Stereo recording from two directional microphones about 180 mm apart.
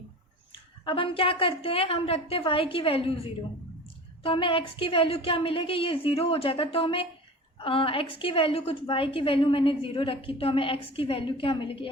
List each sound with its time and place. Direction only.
0.5 s a woman's voice: 30° left (ahead or behind)